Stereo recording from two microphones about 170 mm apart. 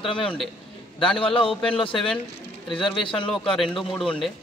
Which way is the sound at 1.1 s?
30° left (ahead or behind).